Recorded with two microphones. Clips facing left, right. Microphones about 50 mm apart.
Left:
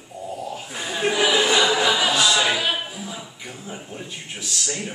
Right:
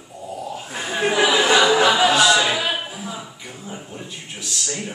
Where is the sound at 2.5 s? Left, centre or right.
Centre.